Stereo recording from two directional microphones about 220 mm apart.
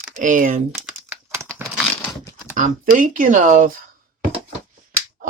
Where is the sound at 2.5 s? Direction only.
35° right (ahead or behind).